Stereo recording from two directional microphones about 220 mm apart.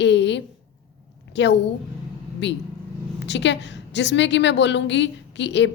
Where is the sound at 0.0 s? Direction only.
55° left (ahead or behind).